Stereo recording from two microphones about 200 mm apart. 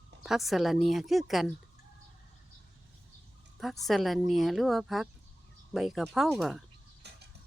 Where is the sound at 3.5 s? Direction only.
Centre (ahead or behind).